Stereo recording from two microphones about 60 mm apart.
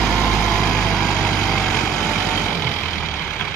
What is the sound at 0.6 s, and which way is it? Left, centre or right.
Vehicle, centre.